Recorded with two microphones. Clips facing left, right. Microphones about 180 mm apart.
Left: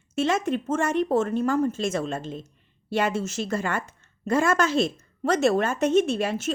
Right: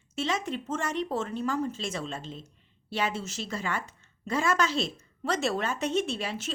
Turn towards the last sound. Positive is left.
turn(degrees=50)  # may be behind; listen again after turning